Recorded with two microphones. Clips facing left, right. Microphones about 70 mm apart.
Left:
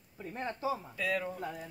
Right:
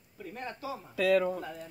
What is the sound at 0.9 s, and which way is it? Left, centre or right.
Speech, right.